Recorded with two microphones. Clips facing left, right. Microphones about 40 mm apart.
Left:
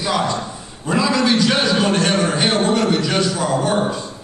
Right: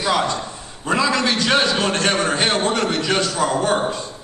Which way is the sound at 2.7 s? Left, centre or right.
Right.